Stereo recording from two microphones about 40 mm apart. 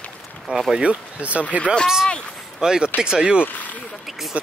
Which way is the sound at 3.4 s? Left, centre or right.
Left.